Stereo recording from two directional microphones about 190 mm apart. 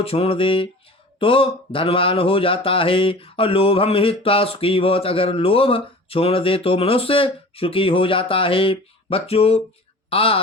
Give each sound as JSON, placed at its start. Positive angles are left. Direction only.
{"t": 0.0, "sound": "speech", "side_deg": 30}